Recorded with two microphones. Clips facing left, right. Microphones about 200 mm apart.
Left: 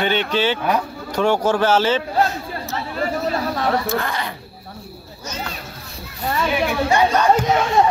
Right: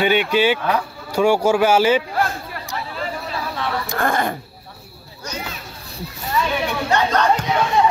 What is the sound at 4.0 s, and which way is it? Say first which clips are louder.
Speech: right 6 dB; 50° right (ahead or behind).